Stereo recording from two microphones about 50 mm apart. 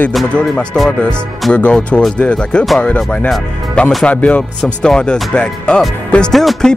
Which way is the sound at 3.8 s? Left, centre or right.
Left.